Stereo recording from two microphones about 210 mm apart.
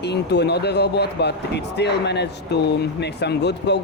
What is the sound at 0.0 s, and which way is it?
Speech, 55° left (ahead or behind).